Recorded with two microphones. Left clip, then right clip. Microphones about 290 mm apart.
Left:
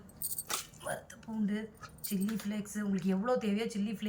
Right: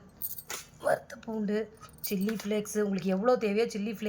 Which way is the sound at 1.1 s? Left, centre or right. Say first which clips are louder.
Right 6 dB; right.